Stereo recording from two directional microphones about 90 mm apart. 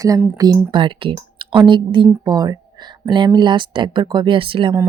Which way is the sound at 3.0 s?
60° right (ahead or behind).